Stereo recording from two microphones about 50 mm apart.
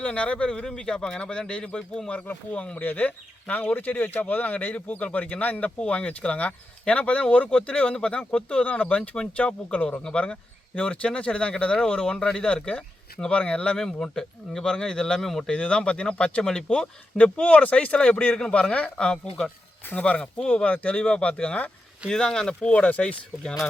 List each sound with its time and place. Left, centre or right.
0.0 s speech: left
13.7 s speech: centre; by 21.7 s left
22.1 s speech: centre
22.8 s speech: left
23.4 s speech: centre